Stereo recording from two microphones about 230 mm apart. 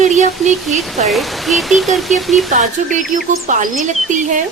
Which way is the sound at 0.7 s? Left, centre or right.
Right.